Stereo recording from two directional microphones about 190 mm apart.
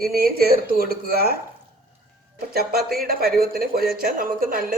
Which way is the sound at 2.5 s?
55° right (ahead or behind).